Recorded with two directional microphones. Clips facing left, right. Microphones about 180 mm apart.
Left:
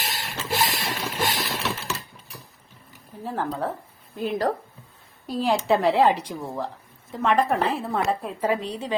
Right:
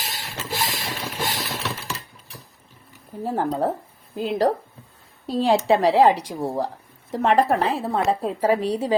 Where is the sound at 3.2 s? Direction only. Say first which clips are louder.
Right 5 dB; 45° right (ahead or behind).